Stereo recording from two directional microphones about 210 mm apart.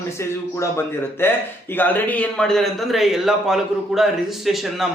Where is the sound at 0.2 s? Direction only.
15° left (ahead or behind).